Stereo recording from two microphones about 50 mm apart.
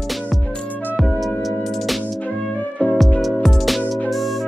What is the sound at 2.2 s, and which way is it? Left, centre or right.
Music, left.